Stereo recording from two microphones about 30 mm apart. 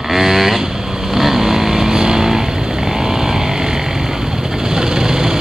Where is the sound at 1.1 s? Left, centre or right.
Centre.